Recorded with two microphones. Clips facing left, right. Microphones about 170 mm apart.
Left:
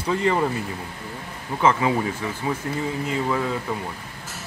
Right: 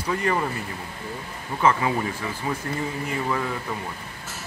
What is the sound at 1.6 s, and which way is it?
Speech, 15° left (ahead or behind).